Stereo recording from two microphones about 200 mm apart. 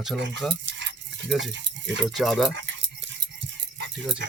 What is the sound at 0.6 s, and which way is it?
Stir, 65° right (ahead or behind).